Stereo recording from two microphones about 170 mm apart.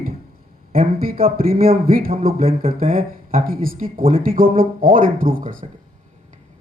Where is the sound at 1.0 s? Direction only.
60° right (ahead or behind).